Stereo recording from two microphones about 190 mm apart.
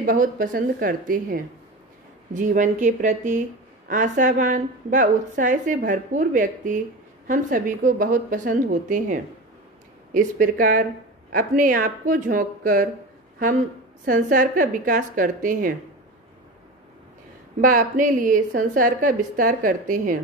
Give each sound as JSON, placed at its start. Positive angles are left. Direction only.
{"t": 0.0, "sound": "a woman's voice", "side_deg": -45}
{"t": 14.0, "sound": "a woman's voice", "side_deg": -45}
{"t": 17.6, "sound": "a woman's voice", "side_deg": -45}